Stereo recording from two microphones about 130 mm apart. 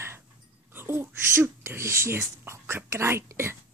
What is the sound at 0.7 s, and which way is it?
Whispering, 15° right (ahead or behind).